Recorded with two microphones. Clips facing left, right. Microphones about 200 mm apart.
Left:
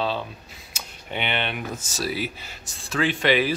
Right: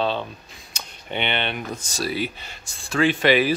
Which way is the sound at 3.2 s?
10° right (ahead or behind).